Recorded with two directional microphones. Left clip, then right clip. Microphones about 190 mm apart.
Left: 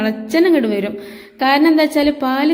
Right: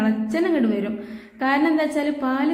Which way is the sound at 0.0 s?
35° left (ahead or behind).